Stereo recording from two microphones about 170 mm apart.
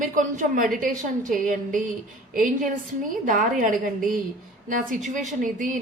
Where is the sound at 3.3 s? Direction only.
50° right (ahead or behind).